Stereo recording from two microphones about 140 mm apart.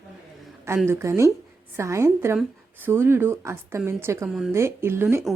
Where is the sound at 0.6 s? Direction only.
15° right (ahead or behind).